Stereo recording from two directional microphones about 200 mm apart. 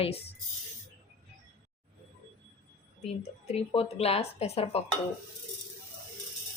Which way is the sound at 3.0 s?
35° left (ahead or behind).